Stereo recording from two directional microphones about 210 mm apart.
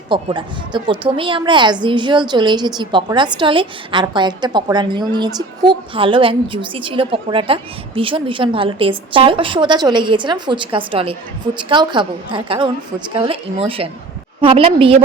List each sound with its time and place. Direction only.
0.1 s a woman's voice: 25° right (ahead or behind)